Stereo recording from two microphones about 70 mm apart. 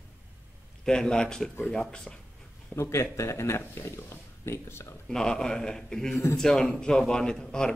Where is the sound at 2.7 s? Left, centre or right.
Left.